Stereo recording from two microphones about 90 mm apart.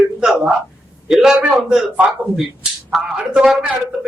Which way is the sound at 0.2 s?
10° right (ahead or behind).